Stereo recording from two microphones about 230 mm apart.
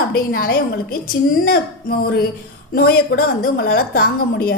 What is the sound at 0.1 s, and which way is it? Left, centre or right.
A woman's voice, left.